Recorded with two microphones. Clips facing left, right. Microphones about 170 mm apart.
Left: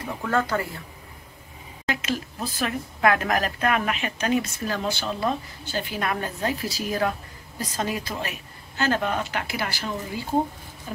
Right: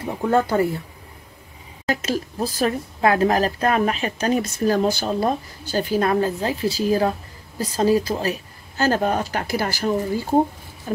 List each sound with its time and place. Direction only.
0.0 s speech: 25° right (ahead or behind)
1.9 s speech: 40° right (ahead or behind)